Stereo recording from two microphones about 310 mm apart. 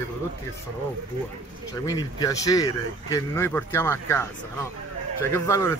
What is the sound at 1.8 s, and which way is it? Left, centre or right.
A man's voice, centre.